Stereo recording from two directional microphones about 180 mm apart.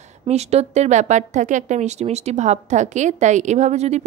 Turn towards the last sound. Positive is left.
turn(degrees=-35)  # may be behind; listen again after turning